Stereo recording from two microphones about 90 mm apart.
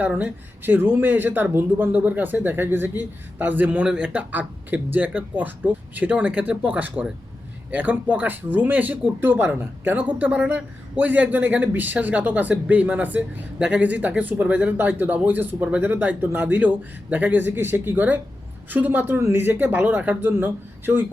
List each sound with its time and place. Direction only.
0.0 s speech: 20° right (ahead or behind)